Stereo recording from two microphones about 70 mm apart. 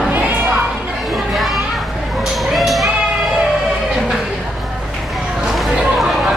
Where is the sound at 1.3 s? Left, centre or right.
Centre.